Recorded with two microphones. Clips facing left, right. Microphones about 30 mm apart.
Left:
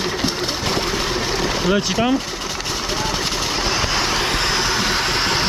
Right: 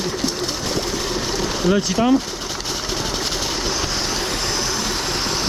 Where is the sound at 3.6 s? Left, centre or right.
Left.